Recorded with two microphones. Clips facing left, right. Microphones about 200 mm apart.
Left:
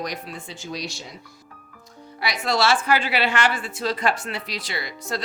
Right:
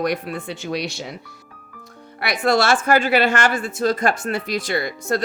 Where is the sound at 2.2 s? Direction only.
55° right (ahead or behind).